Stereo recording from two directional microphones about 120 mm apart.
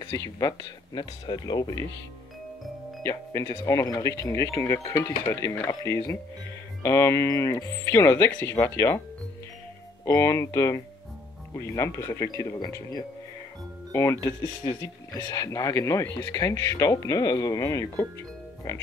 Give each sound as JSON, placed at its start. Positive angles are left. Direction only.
{"t": 0.0, "sound": "speech", "side_deg": 30}
{"t": 3.0, "sound": "speech", "side_deg": 25}
{"t": 10.0, "sound": "speech", "side_deg": 25}
{"t": 13.9, "sound": "speech", "side_deg": 25}